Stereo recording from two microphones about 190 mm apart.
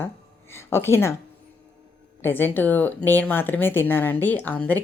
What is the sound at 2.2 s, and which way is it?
Speech, 10° left (ahead or behind).